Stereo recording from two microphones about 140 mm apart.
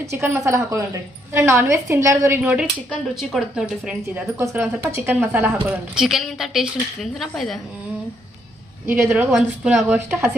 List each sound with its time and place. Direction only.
0.0 s a woman's voice: 20° right (ahead or behind)
4.4 s a woman's voice: 15° right (ahead or behind)
5.9 s a woman's voice: 5° right (ahead or behind)
8.9 s a woman's voice: 15° right (ahead or behind)